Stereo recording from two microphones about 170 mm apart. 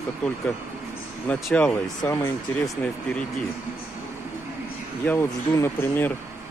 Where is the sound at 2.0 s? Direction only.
20° left (ahead or behind).